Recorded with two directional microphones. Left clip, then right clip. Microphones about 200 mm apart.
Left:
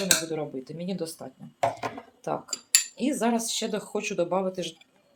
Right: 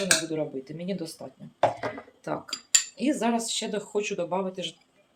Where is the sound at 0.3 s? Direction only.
15° left (ahead or behind).